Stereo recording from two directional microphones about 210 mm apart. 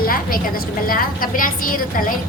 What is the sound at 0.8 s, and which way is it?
A woman's voice, 40° left (ahead or behind).